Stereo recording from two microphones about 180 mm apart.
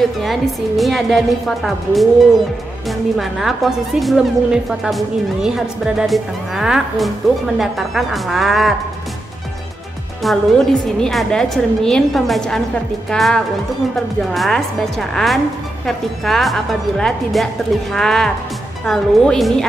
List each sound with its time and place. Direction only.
0.2 s a woman's voice: centre (ahead or behind)
10.2 s a woman's voice: centre (ahead or behind)